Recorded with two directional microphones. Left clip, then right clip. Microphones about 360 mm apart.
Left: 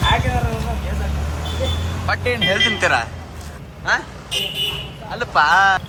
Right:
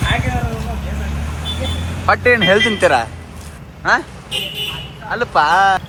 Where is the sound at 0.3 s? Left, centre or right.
Centre.